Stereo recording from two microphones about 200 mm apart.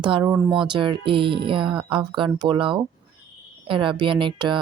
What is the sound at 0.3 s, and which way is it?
Speech, 5° right (ahead or behind).